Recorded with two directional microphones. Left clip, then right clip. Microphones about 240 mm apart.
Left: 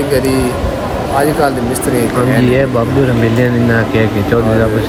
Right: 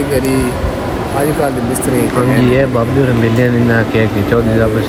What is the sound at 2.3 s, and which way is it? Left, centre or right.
Speech, centre.